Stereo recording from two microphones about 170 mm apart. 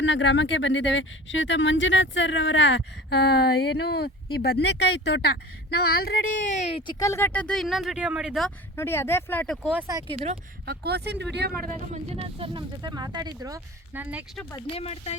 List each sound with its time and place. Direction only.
0.0 s speech: 90° left
5.9 s speech: 65° left (ahead or behind); by 6.9 s 35° left (ahead or behind)
7.0 s speech: 15° left (ahead or behind); by 8.5 s centre (ahead or behind)
8.7 s speech: 15° left (ahead or behind)
9.9 s speech: 35° right (ahead or behind)
10.7 s speech: 70° right (ahead or behind)
11.5 s speech: 5° left (ahead or behind)
12.1 s speech: 35° right (ahead or behind); by 14.3 s 10° right (ahead or behind)
14.5 s speech: 35° left (ahead or behind)